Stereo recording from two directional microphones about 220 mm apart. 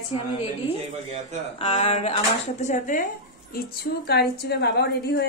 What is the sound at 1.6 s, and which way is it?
Speech, 30° left (ahead or behind).